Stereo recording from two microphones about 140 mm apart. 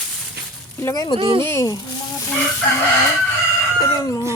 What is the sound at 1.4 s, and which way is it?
Speech, 20° left (ahead or behind).